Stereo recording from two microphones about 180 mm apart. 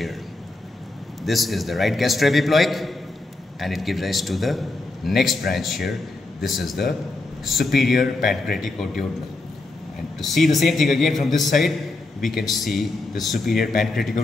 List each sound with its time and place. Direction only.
1.2 s a man's voice: centre (ahead or behind)
10.2 s a man's voice: centre (ahead or behind)